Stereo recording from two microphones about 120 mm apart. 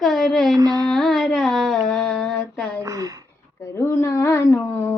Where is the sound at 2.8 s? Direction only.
30° right (ahead or behind).